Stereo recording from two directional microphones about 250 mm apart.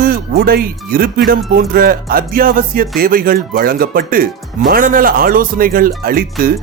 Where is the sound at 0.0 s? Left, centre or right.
Right.